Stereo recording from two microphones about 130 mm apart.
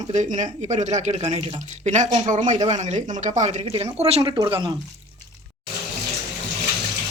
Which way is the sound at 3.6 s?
50° right (ahead or behind).